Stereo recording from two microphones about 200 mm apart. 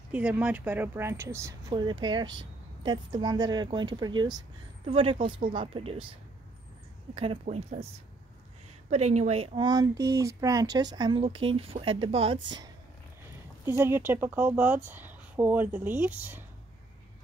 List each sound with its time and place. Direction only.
0.1 s speech: 5° right (ahead or behind); by 6.1 s 25° right (ahead or behind)
7.2 s speech: 30° right (ahead or behind)
8.9 s speech: 35° right (ahead or behind)
13.7 s speech: 10° right (ahead or behind)